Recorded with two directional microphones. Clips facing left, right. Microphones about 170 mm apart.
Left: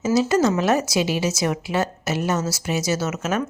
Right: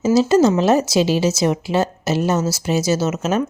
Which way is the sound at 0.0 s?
30° right (ahead or behind).